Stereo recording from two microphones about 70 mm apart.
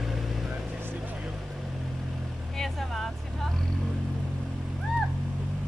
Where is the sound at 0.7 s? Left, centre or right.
Right.